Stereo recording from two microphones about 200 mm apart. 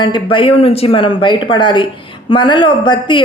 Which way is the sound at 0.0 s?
25° left (ahead or behind).